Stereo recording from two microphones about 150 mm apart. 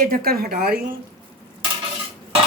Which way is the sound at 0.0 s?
80° right.